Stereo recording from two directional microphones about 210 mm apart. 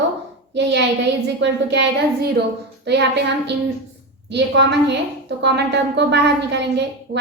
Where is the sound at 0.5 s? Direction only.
55° right (ahead or behind).